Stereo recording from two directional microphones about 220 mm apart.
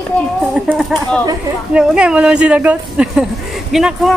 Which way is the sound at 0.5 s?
5° right (ahead or behind).